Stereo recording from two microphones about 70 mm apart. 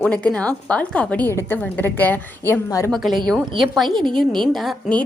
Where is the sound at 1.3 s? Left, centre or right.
Left.